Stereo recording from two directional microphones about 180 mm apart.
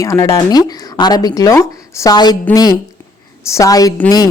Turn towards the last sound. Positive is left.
turn(degrees=20)  # may be behind; listen again after turning